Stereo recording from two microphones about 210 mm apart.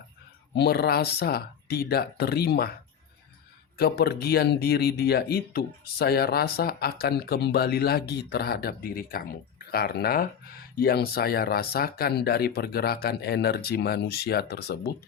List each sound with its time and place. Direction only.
0.5 s speech: 50° left (ahead or behind)
3.8 s speech: 50° left (ahead or behind)